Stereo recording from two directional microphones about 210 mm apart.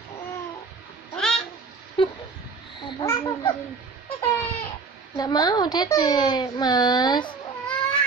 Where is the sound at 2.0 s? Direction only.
25° left (ahead or behind).